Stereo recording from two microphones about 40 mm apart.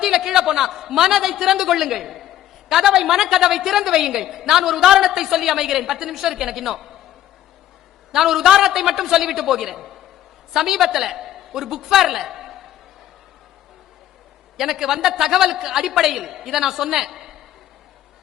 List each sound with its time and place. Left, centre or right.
0.0 s a man's voice: centre
8.1 s a man's voice: centre
14.5 s a man's voice: centre